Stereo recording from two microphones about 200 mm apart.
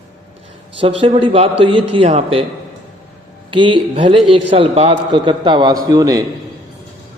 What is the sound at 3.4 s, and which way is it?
A man's voice, 25° right (ahead or behind).